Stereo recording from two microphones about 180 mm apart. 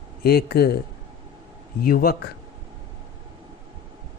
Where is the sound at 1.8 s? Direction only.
55° left (ahead or behind).